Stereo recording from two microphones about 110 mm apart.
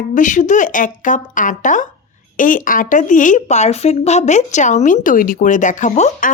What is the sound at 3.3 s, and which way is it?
A woman's voice, 90° left.